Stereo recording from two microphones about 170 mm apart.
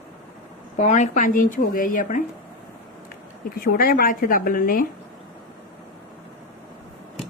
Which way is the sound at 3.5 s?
60° left (ahead or behind).